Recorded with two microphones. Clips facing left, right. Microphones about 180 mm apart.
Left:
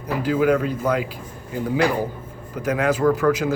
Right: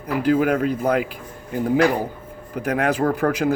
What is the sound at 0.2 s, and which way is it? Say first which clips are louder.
Speech: right 1 dB; 55° right (ahead or behind).